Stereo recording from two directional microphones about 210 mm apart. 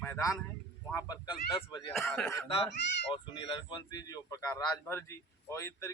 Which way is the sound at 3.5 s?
20° left (ahead or behind).